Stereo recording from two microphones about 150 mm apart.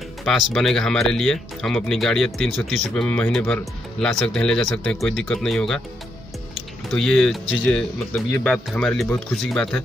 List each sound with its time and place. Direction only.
0.2 s speech: centre (ahead or behind)
6.9 s speech: 5° left (ahead or behind)